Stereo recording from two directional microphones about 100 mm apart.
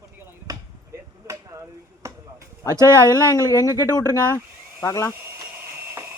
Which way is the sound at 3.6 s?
35° left (ahead or behind).